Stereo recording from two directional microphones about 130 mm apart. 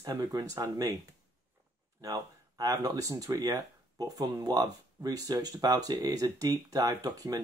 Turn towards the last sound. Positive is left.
turn(degrees=-30)  # may be behind; listen again after turning